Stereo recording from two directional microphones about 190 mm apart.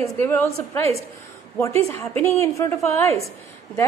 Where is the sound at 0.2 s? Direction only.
10° left (ahead or behind).